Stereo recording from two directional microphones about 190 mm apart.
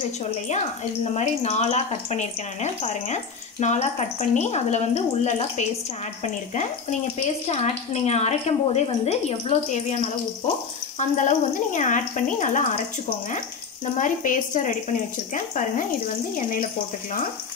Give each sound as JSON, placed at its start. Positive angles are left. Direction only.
{"t": 1.0, "sound": "speech", "side_deg": 35}
{"t": 11.0, "sound": "speech", "side_deg": 40}
{"t": 13.9, "sound": "speech", "side_deg": 45}